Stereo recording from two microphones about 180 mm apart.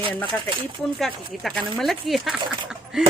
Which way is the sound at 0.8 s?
Centre (ahead or behind).